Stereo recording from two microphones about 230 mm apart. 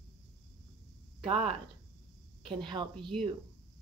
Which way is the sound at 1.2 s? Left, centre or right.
Right.